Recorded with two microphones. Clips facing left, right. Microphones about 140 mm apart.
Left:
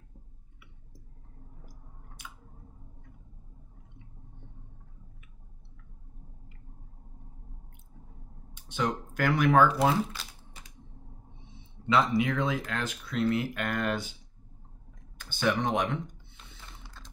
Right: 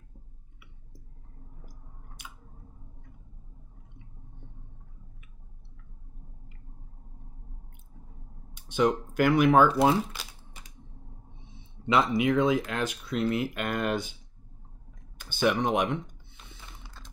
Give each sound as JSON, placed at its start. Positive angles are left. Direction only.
{"t": 8.6, "sound": "speech", "side_deg": -15}
{"t": 11.9, "sound": "speech", "side_deg": -15}
{"t": 15.1, "sound": "speech", "side_deg": -15}